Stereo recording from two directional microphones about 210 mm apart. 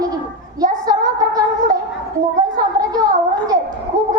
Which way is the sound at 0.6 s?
15° right (ahead or behind).